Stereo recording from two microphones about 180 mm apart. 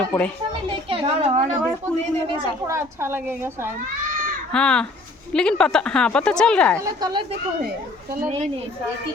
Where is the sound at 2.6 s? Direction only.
15° right (ahead or behind).